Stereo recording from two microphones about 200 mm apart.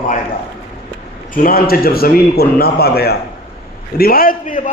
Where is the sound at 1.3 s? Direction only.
45° left (ahead or behind).